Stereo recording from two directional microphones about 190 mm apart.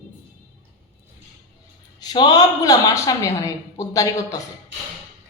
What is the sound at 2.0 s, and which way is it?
A woman's voice, 20° left (ahead or behind).